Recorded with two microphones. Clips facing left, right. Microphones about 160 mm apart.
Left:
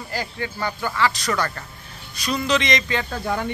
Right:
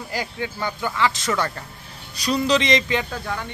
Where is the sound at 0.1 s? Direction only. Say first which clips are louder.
Even; 15° right (ahead or behind).